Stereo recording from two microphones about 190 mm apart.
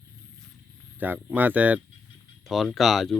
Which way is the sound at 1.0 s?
10° right (ahead or behind).